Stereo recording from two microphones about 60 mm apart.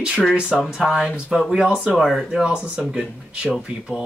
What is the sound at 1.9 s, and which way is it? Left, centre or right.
Speech, centre.